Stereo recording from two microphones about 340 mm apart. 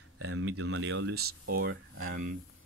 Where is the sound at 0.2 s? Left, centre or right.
Right.